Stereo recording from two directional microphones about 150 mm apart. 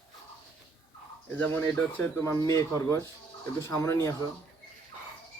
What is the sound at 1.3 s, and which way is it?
Speech, 10° left (ahead or behind).